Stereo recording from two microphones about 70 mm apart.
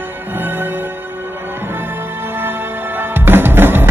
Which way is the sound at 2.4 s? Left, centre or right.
Right.